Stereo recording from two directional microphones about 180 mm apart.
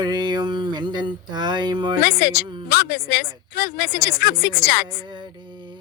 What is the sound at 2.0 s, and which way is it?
Speech, 55° left (ahead or behind).